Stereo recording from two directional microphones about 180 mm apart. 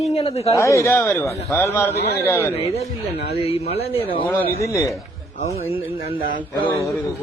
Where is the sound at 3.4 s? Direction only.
35° left (ahead or behind).